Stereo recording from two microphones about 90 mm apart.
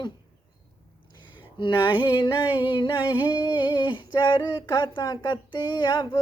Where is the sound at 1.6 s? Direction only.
65° left (ahead or behind).